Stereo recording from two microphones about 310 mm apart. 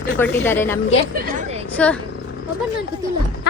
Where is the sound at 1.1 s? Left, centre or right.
Right.